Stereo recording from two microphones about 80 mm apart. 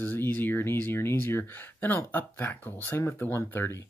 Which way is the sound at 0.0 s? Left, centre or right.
Left.